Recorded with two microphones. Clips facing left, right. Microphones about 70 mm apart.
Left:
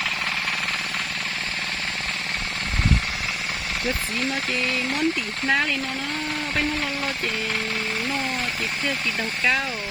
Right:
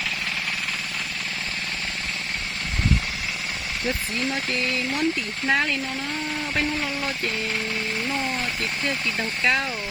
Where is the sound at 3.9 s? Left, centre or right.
Centre.